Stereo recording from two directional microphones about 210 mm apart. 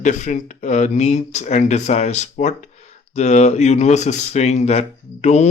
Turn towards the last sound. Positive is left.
turn(degrees=30)  # may be behind; listen again after turning